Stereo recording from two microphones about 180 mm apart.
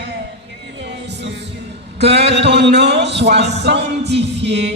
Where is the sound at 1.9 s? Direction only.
70° right (ahead or behind).